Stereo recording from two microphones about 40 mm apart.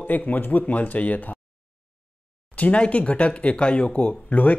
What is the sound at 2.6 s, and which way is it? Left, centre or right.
Speech, left.